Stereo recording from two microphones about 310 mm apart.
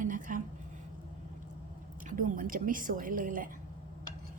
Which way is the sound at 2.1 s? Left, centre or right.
Right.